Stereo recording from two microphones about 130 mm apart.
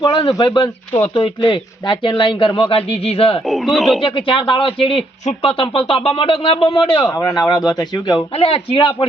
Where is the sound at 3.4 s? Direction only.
Centre (ahead or behind).